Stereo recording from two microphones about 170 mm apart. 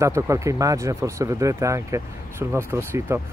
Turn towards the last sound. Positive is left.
turn(degrees=-15)  # may be behind; listen again after turning